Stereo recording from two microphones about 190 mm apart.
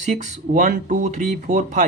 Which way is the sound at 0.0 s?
40° right (ahead or behind).